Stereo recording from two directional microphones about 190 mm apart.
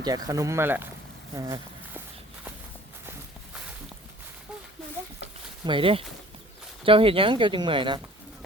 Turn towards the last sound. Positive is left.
turn(degrees=-25)  # may be behind; listen again after turning